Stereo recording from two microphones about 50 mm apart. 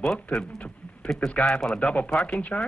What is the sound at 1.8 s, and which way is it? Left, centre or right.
Speech, left.